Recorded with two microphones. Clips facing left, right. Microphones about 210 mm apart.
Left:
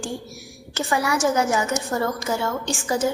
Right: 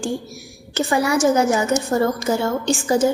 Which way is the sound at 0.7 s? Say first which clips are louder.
Right 5 dB; 30° right (ahead or behind).